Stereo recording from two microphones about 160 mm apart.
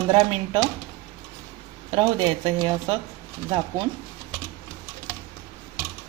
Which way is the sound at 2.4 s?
30° right (ahead or behind).